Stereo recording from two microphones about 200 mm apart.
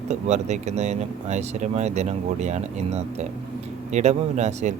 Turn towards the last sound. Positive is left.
turn(degrees=-35)  # may be behind; listen again after turning